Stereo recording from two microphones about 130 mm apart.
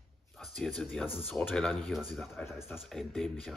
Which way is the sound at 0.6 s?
Centre (ahead or behind).